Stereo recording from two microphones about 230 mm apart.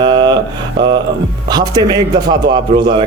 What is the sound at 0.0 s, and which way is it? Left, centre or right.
Mantra, centre.